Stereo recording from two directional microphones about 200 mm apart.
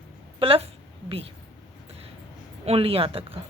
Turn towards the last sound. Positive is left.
turn(degrees=-30)  # may be behind; listen again after turning